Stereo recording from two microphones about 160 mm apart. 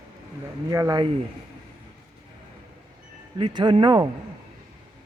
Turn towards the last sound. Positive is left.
turn(degrees=-25)  # may be behind; listen again after turning